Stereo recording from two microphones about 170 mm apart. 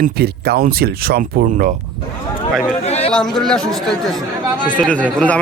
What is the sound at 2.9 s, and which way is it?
Chatter, 40° left (ahead or behind).